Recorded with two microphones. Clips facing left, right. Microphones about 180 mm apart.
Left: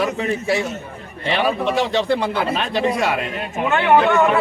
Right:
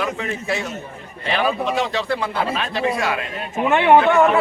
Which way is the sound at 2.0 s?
30° left (ahead or behind).